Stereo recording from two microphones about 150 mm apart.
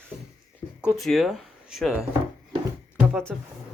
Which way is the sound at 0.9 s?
Centre (ahead or behind).